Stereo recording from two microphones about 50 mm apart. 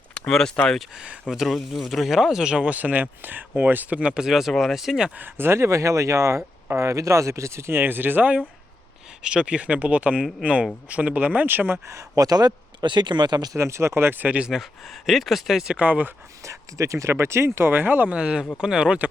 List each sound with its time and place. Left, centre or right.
0.1 s a sound: centre
0.5 s speech: centre
1.3 s speech: centre
2.5 s speech: right
4.2 s speech: centre
5.1 s speech: right
9.2 s speech: right
13.6 s speech: right
14.1 s speech: right
14.5 s speech: centre
15.8 s speech: right
16.4 s speech: right
17.7 s speech: right
18.1 s speech: right